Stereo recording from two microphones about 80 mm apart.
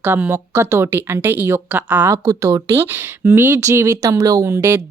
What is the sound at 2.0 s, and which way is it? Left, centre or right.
Speech, right.